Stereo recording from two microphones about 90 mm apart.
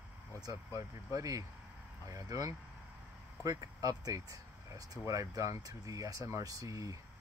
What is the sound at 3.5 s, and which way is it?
Speech, 40° right (ahead or behind).